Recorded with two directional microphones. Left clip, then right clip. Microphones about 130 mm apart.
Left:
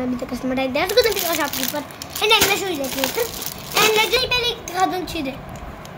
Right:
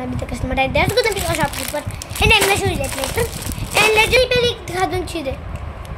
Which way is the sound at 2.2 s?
35° right (ahead or behind).